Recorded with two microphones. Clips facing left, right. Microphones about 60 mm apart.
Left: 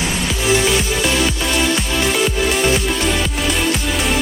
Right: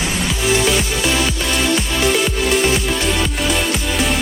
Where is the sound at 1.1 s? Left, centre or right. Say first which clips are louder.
Left 1 dB; centre.